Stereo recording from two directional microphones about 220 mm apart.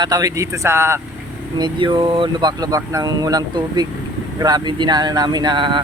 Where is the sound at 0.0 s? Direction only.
15° right (ahead or behind).